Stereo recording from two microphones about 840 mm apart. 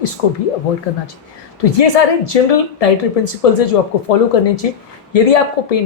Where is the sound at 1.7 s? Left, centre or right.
Left.